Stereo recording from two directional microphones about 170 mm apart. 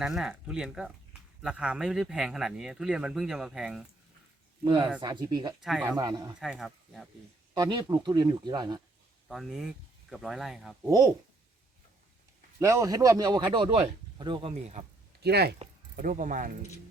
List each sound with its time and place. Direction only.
0.0 s speech: 5° right (ahead or behind)
4.6 s a man's voice: 25° right (ahead or behind)
5.5 s speech: centre (ahead or behind)
6.0 s a man's voice: 25° right (ahead or behind)
6.4 s speech: centre (ahead or behind)
7.5 s a man's voice: 25° right (ahead or behind)
9.3 s speech: centre (ahead or behind)
10.8 s a man's voice: 20° right (ahead or behind)
12.5 s a man's voice: 20° right (ahead or behind)
14.8 s speech: 45° right (ahead or behind)
15.2 s speech: 70° right (ahead or behind)
16.0 s speech: 50° right (ahead or behind)